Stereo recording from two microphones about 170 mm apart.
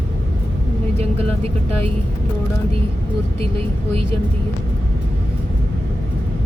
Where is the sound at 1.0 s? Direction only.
35° right (ahead or behind).